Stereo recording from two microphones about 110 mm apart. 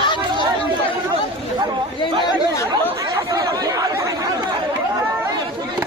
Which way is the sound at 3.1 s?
35° right (ahead or behind).